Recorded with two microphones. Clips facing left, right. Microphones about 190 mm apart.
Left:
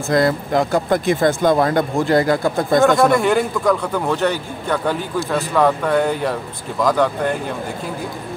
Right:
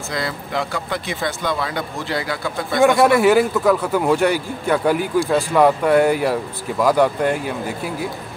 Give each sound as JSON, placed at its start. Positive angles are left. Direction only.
{"t": 0.1, "sound": "speech", "side_deg": 45}
{"t": 2.8, "sound": "speech", "side_deg": -10}